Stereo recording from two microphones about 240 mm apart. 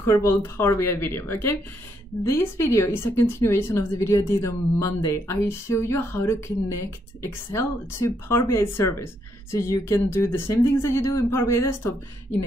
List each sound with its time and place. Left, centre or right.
0.0 s a woman's voice: centre